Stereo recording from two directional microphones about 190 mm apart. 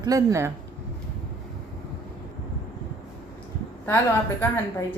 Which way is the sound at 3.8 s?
10° left (ahead or behind).